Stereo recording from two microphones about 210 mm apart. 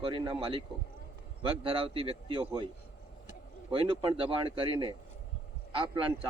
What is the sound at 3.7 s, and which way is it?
A man's voice, 25° right (ahead or behind).